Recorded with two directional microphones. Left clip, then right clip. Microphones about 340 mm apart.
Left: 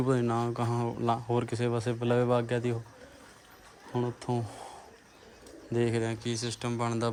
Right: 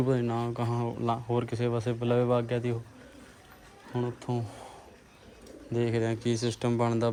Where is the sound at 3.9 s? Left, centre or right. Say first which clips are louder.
Left 1 dB; centre.